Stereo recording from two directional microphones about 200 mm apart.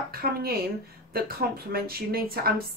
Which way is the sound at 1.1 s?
50° right (ahead or behind).